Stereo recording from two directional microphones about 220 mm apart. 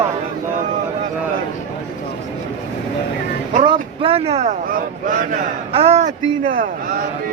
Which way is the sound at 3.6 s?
20° right (ahead or behind).